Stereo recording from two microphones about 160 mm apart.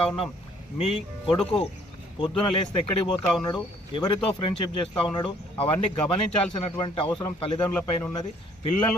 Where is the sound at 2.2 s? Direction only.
30° left (ahead or behind).